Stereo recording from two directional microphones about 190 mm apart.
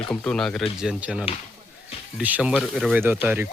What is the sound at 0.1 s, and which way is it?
Speech, 5° left (ahead or behind).